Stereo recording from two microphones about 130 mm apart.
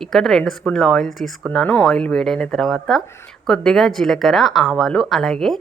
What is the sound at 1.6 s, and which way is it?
Speech, 20° left (ahead or behind).